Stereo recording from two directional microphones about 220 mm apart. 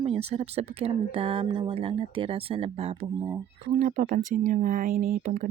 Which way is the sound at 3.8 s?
40° right (ahead or behind).